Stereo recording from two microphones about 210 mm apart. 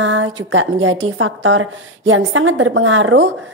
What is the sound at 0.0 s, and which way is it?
A woman's voice, 65° right (ahead or behind).